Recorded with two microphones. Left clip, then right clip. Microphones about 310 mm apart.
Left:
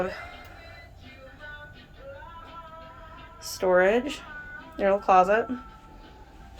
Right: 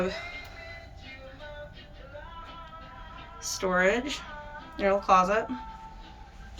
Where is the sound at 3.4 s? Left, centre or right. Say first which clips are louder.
Left 4 dB; centre.